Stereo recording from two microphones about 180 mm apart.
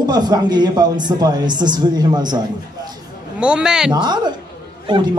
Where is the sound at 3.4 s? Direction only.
5° right (ahead or behind).